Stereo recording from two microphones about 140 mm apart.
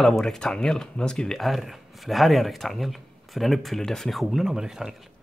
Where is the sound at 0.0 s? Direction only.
5° left (ahead or behind).